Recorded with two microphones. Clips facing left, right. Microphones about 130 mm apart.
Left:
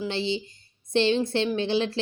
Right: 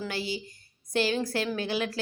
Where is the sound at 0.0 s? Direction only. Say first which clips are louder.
Left 5 dB; 25° left (ahead or behind).